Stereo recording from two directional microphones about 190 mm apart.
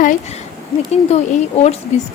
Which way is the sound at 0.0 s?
40° left (ahead or behind).